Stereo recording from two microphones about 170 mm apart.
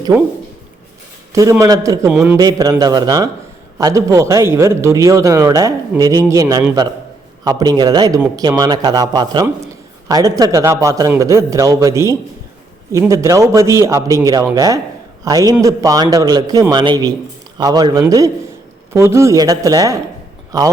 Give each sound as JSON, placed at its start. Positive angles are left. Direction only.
{"t": 1.3, "sound": "a man's voice", "side_deg": -20}